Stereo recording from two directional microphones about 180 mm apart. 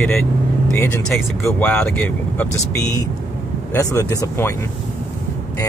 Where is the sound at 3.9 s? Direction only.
15° left (ahead or behind).